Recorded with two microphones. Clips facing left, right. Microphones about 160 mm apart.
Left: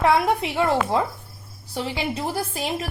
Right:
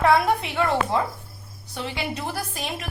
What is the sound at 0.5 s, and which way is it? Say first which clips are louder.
A woman's voice: left 3 dB; 25° left (ahead or behind).